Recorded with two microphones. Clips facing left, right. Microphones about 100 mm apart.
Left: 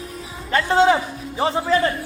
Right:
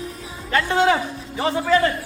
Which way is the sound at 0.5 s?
30° left (ahead or behind).